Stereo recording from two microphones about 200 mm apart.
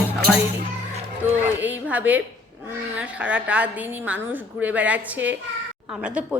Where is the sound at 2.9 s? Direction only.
5° right (ahead or behind).